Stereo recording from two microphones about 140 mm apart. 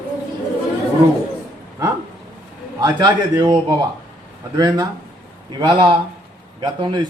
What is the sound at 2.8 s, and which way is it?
Speech, 30° right (ahead or behind).